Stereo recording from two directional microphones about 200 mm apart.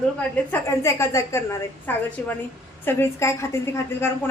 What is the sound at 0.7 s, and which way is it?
A woman's voice, 15° left (ahead or behind).